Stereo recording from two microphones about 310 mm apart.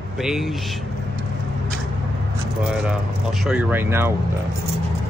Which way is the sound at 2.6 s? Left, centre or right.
Centre.